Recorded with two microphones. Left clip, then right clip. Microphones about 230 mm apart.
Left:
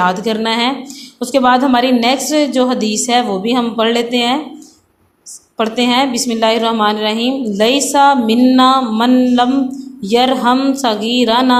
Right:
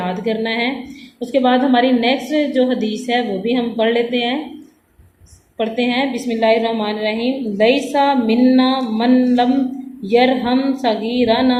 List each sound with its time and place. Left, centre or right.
0.0 s a woman's voice: left
5.5 s a woman's voice: left